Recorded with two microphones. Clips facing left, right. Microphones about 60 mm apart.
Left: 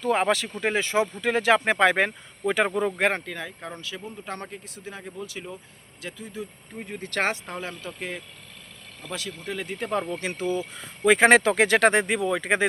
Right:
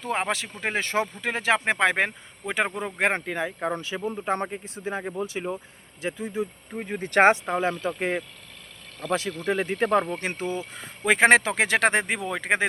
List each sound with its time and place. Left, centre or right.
0.0 s speech: right
0.8 s speech: right
1.2 s speech: right
2.6 s speech: centre
3.0 s speech: right
9.0 s speech: centre
9.5 s speech: right
10.2 s speech: right
11.0 s speech: right